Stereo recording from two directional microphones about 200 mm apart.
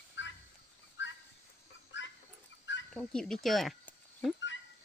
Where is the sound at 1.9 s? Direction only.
65° left (ahead or behind).